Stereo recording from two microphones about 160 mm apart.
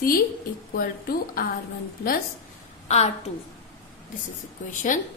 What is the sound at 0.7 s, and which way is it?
Speech, 65° left (ahead or behind).